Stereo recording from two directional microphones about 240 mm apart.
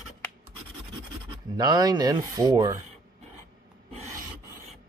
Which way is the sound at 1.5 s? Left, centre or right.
Centre.